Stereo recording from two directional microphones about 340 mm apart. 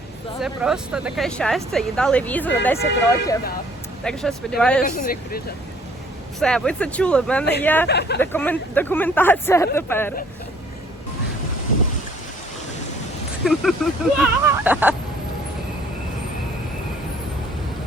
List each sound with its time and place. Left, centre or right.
0.4 s speech: centre
4.0 s speech: centre
4.8 s speech: left
6.4 s speech: centre
7.9 s speech: left
8.2 s speech: centre
13.4 s speech: centre